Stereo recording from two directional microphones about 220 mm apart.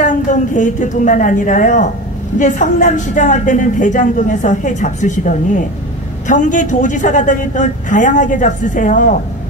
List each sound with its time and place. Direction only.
0.0 s a woman's voice: 35° left (ahead or behind)